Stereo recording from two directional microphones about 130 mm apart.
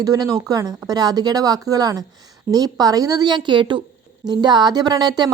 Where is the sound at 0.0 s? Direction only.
30° right (ahead or behind).